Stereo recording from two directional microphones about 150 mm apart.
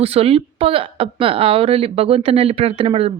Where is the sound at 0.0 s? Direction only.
40° right (ahead or behind).